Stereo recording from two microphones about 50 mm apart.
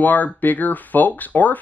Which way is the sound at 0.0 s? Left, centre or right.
Left.